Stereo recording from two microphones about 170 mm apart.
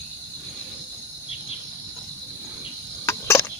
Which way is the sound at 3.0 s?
15° left (ahead or behind).